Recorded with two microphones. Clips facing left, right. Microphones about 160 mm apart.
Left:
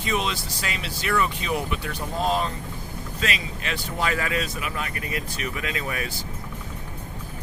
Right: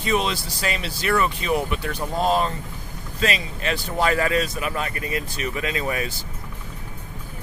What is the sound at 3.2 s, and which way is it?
Speech, 35° right (ahead or behind).